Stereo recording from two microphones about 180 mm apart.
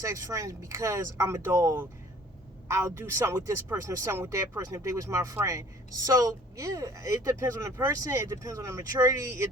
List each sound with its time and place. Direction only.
0.0 s speech: 15° right (ahead or behind)